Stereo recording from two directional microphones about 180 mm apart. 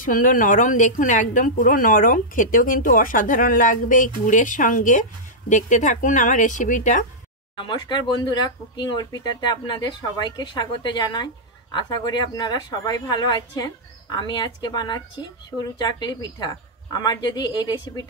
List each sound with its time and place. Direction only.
0.0 s speech: 50° left (ahead or behind)
7.5 s speech: 25° left (ahead or behind)